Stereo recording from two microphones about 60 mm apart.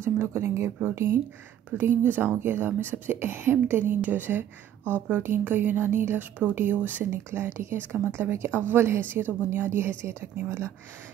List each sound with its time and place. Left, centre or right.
0.0 s speech: right
1.9 s speech: right
7.2 s speech: right